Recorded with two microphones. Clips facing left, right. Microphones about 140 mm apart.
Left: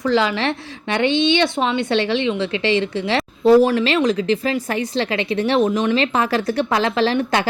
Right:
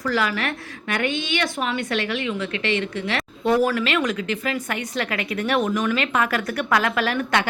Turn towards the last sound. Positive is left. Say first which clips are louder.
# left 4 dB
turn(degrees=30)  # may be behind; listen again after turning